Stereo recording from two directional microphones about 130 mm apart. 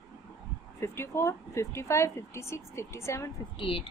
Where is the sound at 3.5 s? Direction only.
45° left (ahead or behind).